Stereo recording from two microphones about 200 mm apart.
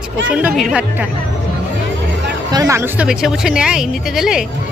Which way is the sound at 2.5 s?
15° right (ahead or behind).